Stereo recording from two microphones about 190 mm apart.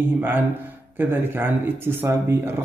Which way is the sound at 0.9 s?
10° right (ahead or behind).